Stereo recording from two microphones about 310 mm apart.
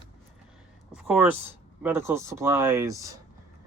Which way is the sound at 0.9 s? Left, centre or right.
Centre.